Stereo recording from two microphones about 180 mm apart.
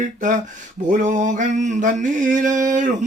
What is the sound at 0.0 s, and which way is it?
Mantra, 45° right (ahead or behind).